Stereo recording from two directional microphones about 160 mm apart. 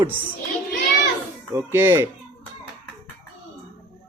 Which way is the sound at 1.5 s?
15° right (ahead or behind).